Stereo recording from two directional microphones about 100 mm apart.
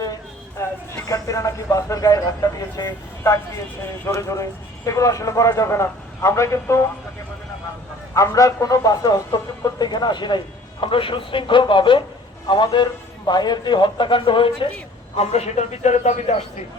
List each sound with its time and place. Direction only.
0.6 s a sound: 30° left (ahead or behind)
1.0 s speech: 35° left (ahead or behind)
8.1 s a man's voice: 35° left (ahead or behind); by 14.7 s 60° left (ahead or behind)
15.1 s a man's voice: 90° left